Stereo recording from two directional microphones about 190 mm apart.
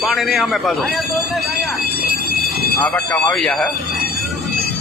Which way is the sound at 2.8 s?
15° left (ahead or behind).